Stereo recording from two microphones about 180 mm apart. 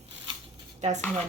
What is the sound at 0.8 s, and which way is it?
Speech, 40° right (ahead or behind).